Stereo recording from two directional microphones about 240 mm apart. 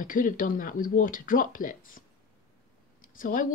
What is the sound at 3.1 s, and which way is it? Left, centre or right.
Speech, left.